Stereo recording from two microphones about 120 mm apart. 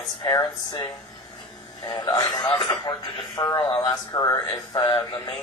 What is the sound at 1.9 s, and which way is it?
Speech, 35° left (ahead or behind).